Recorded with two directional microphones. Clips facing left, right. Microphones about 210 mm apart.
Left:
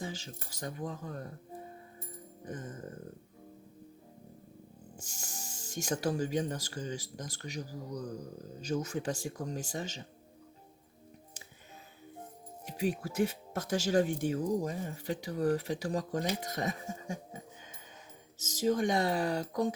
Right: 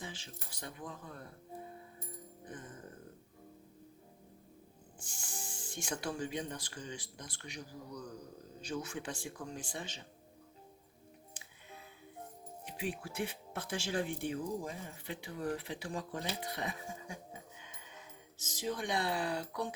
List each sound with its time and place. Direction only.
0.0 s speech: 40° left (ahead or behind)
4.9 s speech: 40° left (ahead or behind)
12.6 s speech: 40° left (ahead or behind)
18.3 s speech: 40° left (ahead or behind)